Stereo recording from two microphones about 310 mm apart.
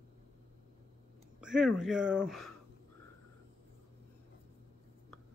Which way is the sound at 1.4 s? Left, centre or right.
Centre.